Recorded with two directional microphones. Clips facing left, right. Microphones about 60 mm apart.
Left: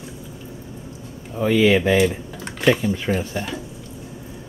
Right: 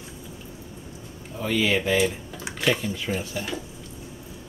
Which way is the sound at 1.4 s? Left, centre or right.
Left.